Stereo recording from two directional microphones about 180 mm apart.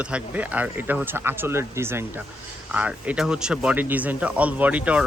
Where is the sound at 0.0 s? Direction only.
5° right (ahead or behind).